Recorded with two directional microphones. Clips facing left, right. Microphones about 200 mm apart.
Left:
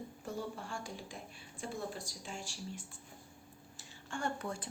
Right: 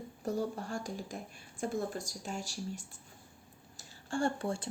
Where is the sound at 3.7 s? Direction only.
30° right (ahead or behind).